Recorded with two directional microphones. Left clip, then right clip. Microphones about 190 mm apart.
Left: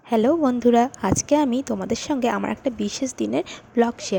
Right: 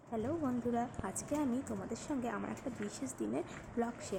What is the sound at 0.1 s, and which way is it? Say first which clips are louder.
A woman's voice: left 19 dB; 50° left (ahead or behind).